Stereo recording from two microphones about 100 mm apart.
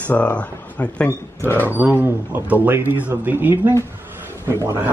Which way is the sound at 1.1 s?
30° left (ahead or behind).